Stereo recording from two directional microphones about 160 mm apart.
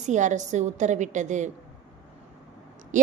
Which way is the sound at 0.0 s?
50° right (ahead or behind).